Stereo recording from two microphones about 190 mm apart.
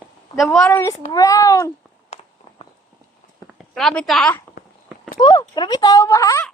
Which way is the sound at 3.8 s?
Centre (ahead or behind).